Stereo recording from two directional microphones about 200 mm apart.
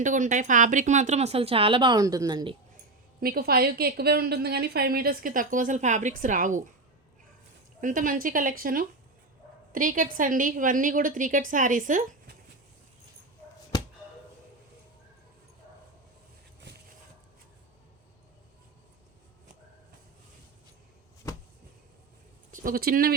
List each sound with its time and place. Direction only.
0.0 s speech: 40° right (ahead or behind); by 2.6 s 20° right (ahead or behind)
3.2 s a woman's voice: 50° right (ahead or behind)
7.8 s a woman's voice: 40° right (ahead or behind)
16.7 s a sound: 60° right (ahead or behind)
22.5 s a woman's voice: 45° right (ahead or behind)